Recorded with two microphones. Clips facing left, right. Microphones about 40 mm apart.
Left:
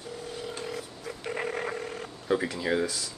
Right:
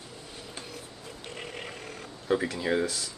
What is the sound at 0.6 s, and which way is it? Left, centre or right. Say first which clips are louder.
Telephone: left 6 dB; left.